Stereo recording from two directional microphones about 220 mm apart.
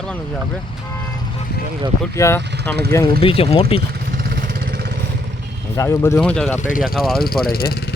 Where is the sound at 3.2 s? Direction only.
25° left (ahead or behind).